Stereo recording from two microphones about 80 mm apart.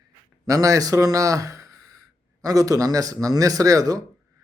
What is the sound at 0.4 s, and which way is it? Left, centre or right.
Speech, right.